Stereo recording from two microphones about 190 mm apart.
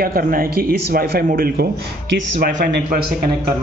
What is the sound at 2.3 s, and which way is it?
Speech, 40° right (ahead or behind).